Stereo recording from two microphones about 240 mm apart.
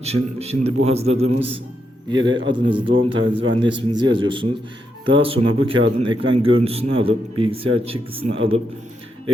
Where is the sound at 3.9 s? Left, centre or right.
Centre.